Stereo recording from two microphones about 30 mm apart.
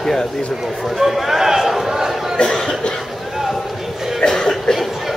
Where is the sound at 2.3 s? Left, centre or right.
Left.